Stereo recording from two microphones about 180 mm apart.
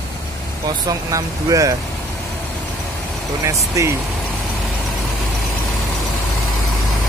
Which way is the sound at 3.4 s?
15° right (ahead or behind).